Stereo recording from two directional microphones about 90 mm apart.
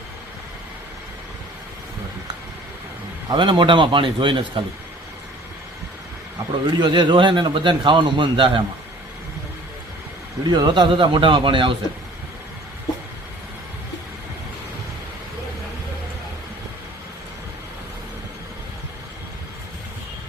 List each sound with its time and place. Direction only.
3.3 s a man's voice: 60° right (ahead or behind)
6.7 s a man's voice: 60° right (ahead or behind)
10.4 s speech: 50° right (ahead or behind); by 11.8 s 70° right (ahead or behind)